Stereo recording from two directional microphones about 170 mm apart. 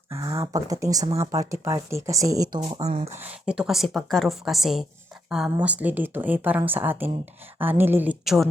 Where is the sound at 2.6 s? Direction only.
30° right (ahead or behind).